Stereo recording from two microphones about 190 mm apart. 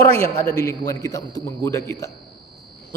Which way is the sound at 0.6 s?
15° left (ahead or behind).